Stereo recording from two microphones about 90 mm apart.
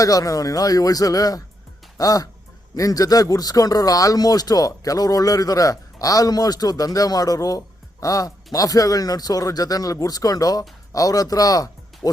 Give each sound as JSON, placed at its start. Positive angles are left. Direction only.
{"t": 0.0, "sound": "a man's voice", "side_deg": 40}